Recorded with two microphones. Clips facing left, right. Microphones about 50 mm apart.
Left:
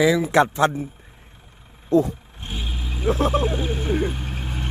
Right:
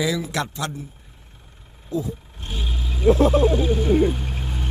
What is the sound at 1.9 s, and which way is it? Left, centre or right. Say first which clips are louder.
Speech: left 9 dB; left.